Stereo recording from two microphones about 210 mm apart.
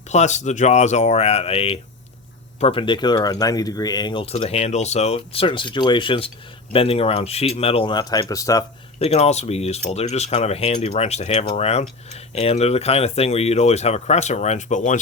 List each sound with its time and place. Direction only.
0.1 s speech: 35° left (ahead or behind); by 8.6 s 15° left (ahead or behind)
9.0 s speech: 30° left (ahead or behind)